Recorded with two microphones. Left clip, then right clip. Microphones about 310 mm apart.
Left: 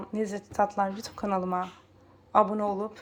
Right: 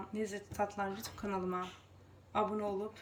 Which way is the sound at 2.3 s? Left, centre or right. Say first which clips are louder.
Left 11 dB; centre.